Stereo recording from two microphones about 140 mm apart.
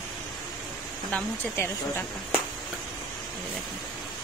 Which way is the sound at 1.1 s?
15° left (ahead or behind).